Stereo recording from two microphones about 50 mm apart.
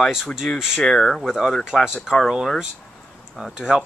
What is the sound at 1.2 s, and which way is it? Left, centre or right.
Speech, centre.